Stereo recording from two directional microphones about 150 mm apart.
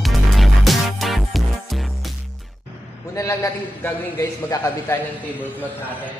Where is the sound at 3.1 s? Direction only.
20° left (ahead or behind).